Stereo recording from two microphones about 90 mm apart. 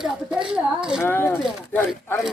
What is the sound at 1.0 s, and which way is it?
Speech, 25° left (ahead or behind).